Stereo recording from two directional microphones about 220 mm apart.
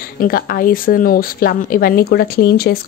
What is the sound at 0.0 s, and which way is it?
Speech, 40° left (ahead or behind).